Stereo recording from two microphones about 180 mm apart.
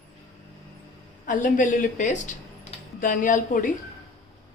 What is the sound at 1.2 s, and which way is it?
A woman's voice, 45° left (ahead or behind).